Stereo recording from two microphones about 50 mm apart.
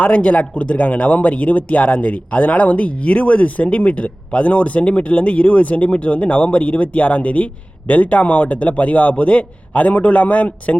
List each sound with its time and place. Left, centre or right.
0.0 s speech: left